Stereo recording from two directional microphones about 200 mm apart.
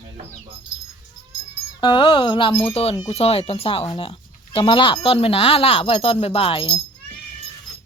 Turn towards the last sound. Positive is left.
turn(degrees=25)  # may be behind; listen again after turning